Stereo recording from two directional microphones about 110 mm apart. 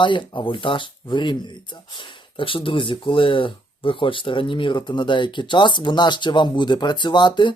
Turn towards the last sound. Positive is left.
turn(degrees=45)  # may be behind; listen again after turning